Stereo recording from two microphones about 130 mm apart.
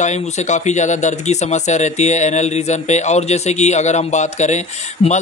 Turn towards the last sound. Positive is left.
turn(degrees=65)  # may be behind; listen again after turning